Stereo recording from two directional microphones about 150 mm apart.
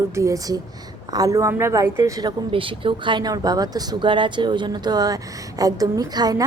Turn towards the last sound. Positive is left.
turn(degrees=-25)  # may be behind; listen again after turning